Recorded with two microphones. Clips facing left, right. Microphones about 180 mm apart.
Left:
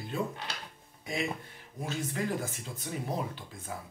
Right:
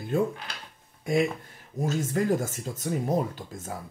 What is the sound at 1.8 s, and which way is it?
Speech, 45° right (ahead or behind).